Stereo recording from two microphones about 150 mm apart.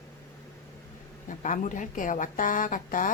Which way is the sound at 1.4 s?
55° left (ahead or behind).